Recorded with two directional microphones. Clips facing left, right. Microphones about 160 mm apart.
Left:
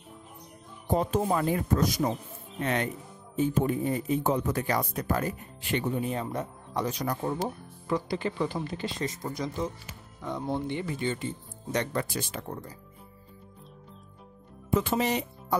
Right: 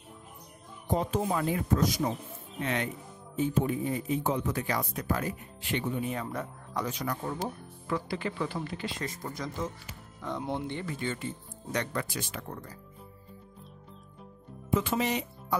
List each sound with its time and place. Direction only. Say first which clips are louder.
0.9 s speech: left 3 dB; 45° left (ahead or behind)
6.3 s speech: left 3 dB; 25° left (ahead or behind)
6.9 s speech: left 4 dB; 35° left (ahead or behind)
7.4 s speech: left 3 dB; 20° left (ahead or behind)
10.2 s speech: left 2 dB; 5° left (ahead or behind); by 12.5 s 30° left (ahead or behind)
14.7 s speech: left 2 dB; 40° left (ahead or behind)